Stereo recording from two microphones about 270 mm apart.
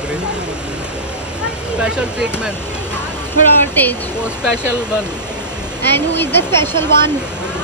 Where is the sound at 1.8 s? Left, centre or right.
Centre.